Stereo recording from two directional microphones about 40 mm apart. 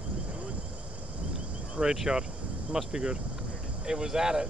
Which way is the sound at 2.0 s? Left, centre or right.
Centre.